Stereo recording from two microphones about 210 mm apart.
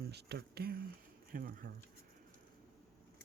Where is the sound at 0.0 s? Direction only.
50° right (ahead or behind).